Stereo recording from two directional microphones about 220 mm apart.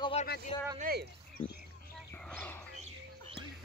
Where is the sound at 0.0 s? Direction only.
25° left (ahead or behind).